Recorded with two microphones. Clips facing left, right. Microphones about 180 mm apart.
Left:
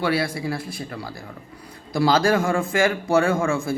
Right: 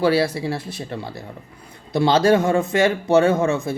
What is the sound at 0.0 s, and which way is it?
Speech, 25° right (ahead or behind).